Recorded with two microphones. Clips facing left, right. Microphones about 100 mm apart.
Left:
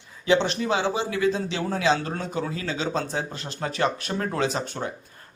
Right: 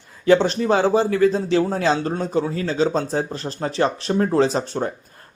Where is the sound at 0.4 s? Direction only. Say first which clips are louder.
Right 6 dB; 35° right (ahead or behind).